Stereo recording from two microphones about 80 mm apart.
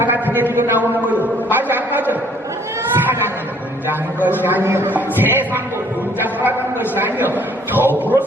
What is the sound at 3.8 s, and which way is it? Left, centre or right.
A man's voice, right.